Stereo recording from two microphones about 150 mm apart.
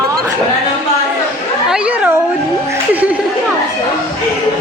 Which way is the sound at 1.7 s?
10° right (ahead or behind).